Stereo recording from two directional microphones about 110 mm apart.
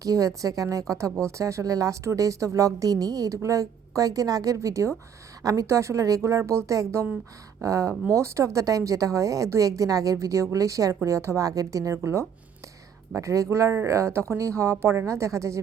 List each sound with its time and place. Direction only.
0.0 s a woman's voice: 30° right (ahead or behind)